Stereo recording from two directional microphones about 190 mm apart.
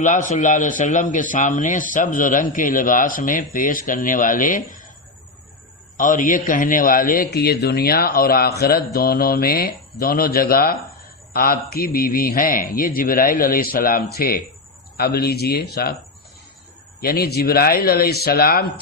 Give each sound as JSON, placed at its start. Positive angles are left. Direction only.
{"t": 0.0, "sound": "a man's voice", "side_deg": 40}
{"t": 5.9, "sound": "a man's voice", "side_deg": 45}
{"t": 17.0, "sound": "a man's voice", "side_deg": 55}